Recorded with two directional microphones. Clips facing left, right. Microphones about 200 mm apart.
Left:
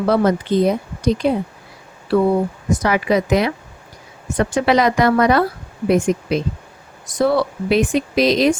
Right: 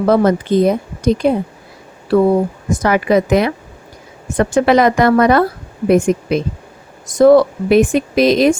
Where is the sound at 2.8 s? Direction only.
50° right (ahead or behind).